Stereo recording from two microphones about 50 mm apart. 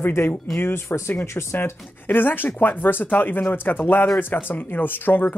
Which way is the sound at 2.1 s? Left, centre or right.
Left.